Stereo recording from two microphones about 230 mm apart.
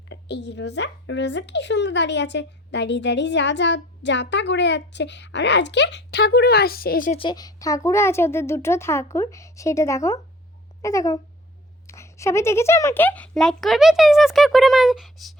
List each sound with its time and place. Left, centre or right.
0.1 s speech: left
7.2 s a woman's voice: centre